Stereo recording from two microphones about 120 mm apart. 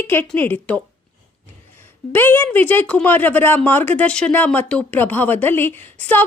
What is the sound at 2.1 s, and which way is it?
A woman's voice, 15° left (ahead or behind).